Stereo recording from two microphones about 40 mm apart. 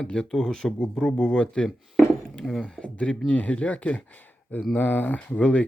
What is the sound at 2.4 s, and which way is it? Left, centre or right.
Speech, centre.